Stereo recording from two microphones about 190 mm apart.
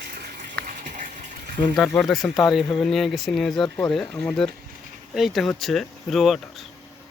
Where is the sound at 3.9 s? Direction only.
5° left (ahead or behind).